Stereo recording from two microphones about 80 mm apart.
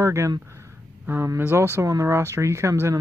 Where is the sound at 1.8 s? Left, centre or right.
Right.